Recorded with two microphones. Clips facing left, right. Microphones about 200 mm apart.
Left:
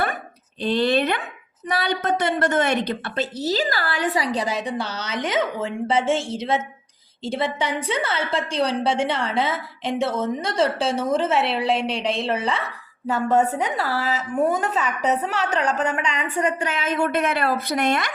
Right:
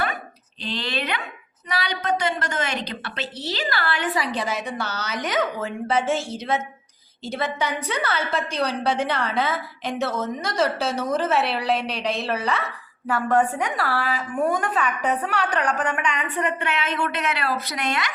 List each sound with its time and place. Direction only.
0.6 s a woman's voice: 50° left (ahead or behind); by 16.5 s 25° left (ahead or behind)
16.8 s a woman's voice: 45° left (ahead or behind)